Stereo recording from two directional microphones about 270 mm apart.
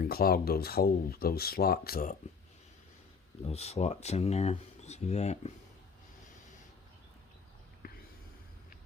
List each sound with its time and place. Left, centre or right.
0.0 s speech: left
3.4 s speech: left
7.8 s a sound: left